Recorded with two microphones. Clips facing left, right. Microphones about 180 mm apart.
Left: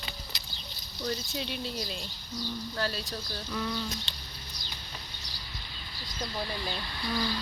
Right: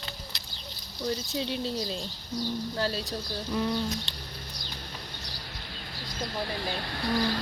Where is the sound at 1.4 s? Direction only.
25° right (ahead or behind).